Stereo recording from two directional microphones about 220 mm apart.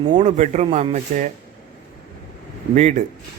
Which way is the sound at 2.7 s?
35° right (ahead or behind).